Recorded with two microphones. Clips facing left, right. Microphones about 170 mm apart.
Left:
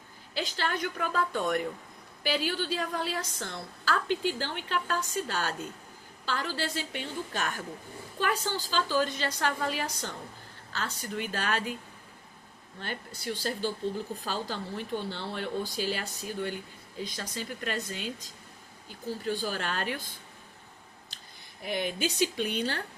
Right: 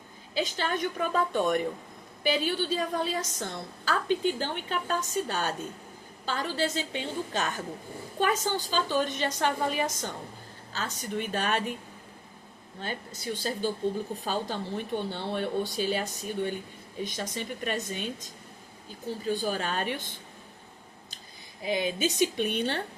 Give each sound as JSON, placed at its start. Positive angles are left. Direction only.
{"t": 0.3, "sound": "a woman's voice", "side_deg": -15}
{"t": 12.8, "sound": "a woman's voice", "side_deg": -20}
{"t": 13.8, "sound": "speech", "side_deg": -55}
{"t": 14.3, "sound": "a woman's voice", "side_deg": -20}
{"t": 15.1, "sound": "speech", "side_deg": -55}
{"t": 15.6, "sound": "a woman's voice", "side_deg": -20}
{"t": 19.3, "sound": "a woman's voice", "side_deg": -20}
{"t": 21.9, "sound": "a woman's voice", "side_deg": -20}